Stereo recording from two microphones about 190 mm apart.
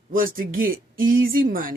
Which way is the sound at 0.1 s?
50° right (ahead or behind).